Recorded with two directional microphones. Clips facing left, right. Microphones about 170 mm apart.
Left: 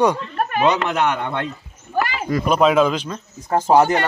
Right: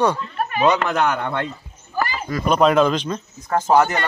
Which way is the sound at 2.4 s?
5° left (ahead or behind).